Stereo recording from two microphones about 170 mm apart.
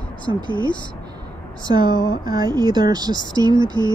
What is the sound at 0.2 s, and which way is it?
Speech, 30° left (ahead or behind).